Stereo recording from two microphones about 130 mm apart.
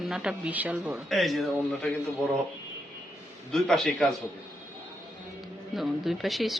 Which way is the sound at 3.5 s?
5° left (ahead or behind).